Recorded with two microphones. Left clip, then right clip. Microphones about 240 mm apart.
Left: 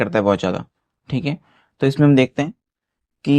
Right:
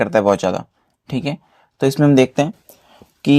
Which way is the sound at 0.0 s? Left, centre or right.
Right.